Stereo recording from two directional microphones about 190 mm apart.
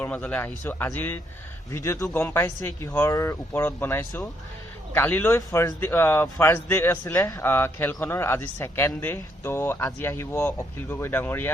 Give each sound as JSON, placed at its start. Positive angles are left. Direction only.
{"t": 0.0, "sound": "a man's voice", "side_deg": 5}